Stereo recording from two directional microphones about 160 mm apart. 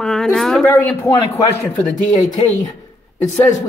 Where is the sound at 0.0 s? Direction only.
5° left (ahead or behind).